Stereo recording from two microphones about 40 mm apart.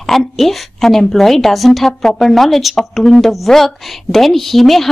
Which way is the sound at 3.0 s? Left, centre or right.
Centre.